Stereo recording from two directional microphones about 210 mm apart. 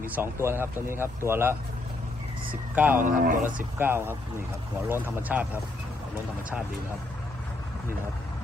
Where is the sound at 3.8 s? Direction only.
10° right (ahead or behind).